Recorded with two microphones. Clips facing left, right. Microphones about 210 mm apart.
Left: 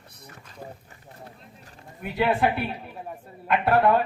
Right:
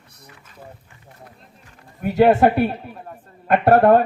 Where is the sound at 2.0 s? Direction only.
45° right (ahead or behind).